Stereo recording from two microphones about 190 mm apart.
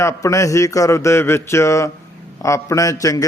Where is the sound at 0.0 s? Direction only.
15° left (ahead or behind).